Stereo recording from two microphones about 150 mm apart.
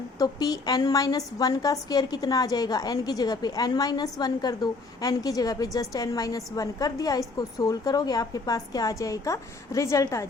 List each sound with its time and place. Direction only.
0.2 s a woman's voice: 25° left (ahead or behind)